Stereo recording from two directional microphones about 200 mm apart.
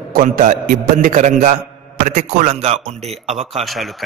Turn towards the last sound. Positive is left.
turn(degrees=0)  # may be behind; listen again after turning